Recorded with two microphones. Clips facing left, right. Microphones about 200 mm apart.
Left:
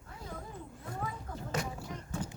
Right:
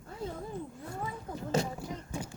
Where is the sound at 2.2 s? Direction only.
10° right (ahead or behind).